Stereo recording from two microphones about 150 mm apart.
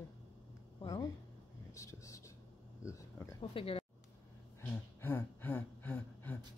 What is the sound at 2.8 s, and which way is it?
Speech, 20° left (ahead or behind).